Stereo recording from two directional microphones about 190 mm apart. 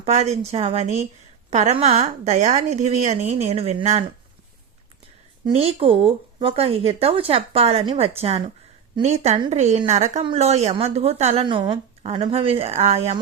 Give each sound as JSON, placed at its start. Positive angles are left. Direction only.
{"t": 0.0, "sound": "a woman's voice", "side_deg": -35}
{"t": 5.5, "sound": "a woman's voice", "side_deg": -30}